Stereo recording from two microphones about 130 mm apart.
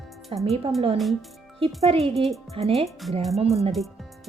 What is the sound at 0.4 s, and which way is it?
Speech, 50° right (ahead or behind).